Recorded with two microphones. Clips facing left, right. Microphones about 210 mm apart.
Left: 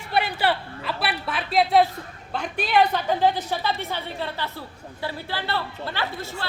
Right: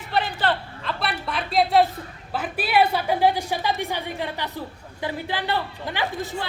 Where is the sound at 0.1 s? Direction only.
10° left (ahead or behind).